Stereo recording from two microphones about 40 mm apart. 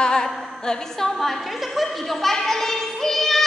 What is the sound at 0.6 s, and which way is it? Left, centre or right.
A woman's voice, centre.